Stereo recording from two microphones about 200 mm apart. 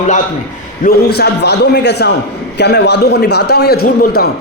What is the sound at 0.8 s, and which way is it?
A man's voice, 55° left (ahead or behind).